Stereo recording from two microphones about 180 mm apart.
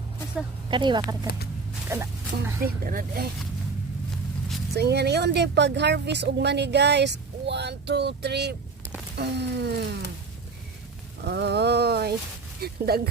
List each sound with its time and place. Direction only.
0.7 s speech: 25° right (ahead or behind)
1.9 s speech: 15° right (ahead or behind)
2.6 s speech: 50° right (ahead or behind)
4.7 s speech: 65° right (ahead or behind)
11.2 s a sound: 65° right (ahead or behind)
12.5 s speech: 60° right (ahead or behind)